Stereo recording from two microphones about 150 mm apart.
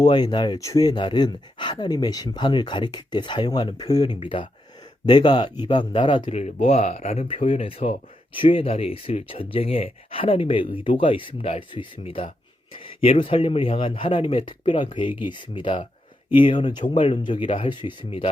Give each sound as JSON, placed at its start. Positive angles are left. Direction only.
{"t": 0.0, "sound": "speech", "side_deg": 30}
{"t": 6.3, "sound": "speech", "side_deg": 45}